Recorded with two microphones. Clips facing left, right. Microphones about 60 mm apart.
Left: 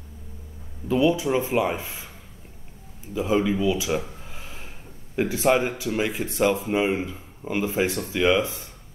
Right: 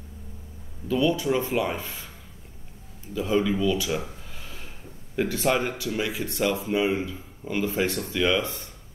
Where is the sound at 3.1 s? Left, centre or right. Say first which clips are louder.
Left 1 dB; centre.